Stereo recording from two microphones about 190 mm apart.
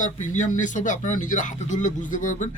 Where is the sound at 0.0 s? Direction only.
40° left (ahead or behind).